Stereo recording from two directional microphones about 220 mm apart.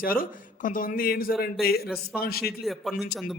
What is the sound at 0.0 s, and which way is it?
A man's voice, 40° left (ahead or behind).